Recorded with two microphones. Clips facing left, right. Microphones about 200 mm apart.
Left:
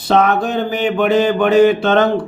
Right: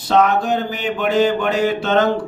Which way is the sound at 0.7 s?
60° left (ahead or behind).